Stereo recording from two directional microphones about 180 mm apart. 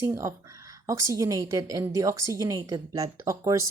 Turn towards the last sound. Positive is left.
turn(degrees=-15)  # may be behind; listen again after turning